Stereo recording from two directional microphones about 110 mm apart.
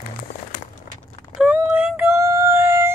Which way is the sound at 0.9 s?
90° left.